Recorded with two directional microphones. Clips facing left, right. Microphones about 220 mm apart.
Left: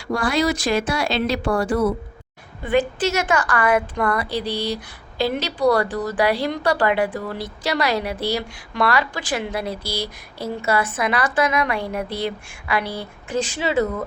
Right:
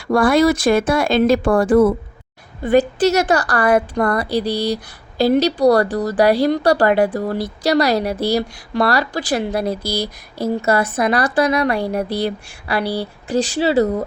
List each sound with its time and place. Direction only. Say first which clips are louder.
0.1 s speech: right 7 dB; 55° right (ahead or behind)
2.6 s a woman's voice: right 6 dB; 40° right (ahead or behind)